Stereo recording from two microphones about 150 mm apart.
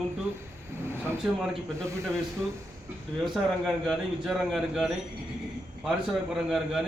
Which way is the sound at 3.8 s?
Centre (ahead or behind).